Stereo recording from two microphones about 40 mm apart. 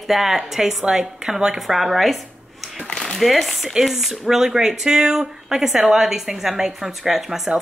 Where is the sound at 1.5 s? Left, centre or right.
Centre.